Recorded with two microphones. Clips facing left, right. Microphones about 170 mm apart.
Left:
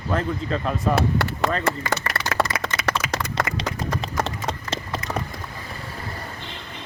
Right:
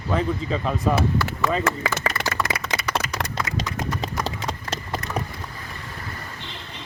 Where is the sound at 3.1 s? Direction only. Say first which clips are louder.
Left 3 dB; 85° left.